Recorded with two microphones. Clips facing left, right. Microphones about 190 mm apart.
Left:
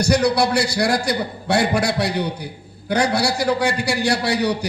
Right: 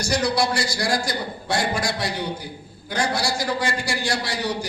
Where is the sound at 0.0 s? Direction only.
60° left (ahead or behind).